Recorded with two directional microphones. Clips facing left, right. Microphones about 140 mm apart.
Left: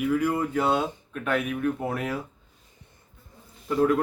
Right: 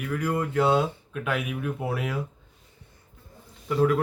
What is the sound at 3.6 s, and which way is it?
Speech, centre (ahead or behind).